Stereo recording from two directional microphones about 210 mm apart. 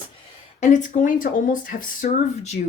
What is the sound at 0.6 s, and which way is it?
Speech, 35° left (ahead or behind).